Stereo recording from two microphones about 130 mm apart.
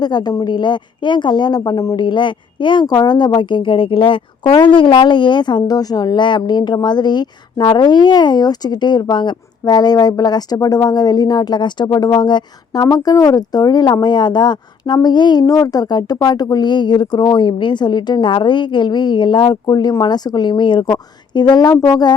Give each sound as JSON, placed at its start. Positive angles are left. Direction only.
{"t": 0.0, "sound": "speech", "side_deg": 35}
{"t": 2.0, "sound": "speech", "side_deg": 40}